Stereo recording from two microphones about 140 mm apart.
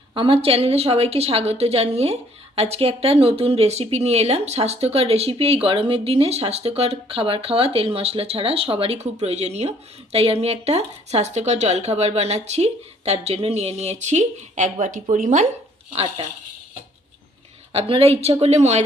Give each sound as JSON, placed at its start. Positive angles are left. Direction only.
{"t": 0.1, "sound": "speech", "side_deg": -40}
{"t": 15.9, "sound": "speech", "side_deg": -40}
{"t": 17.7, "sound": "speech", "side_deg": -40}